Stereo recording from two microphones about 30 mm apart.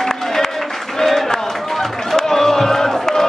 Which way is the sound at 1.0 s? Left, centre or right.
Centre.